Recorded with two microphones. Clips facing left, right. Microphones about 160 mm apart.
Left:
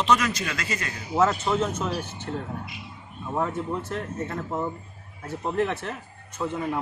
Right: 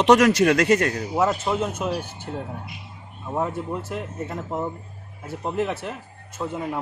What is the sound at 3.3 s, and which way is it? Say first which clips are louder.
A man's voice: right 1 dB; 10° right (ahead or behind).